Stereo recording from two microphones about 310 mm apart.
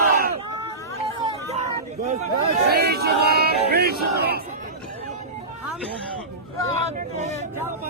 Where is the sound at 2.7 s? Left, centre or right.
Right.